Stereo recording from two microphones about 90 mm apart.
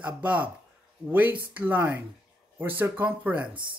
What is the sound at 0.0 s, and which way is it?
Speech, 15° right (ahead or behind).